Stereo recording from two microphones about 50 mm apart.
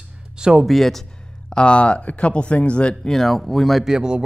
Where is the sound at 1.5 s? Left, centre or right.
Left.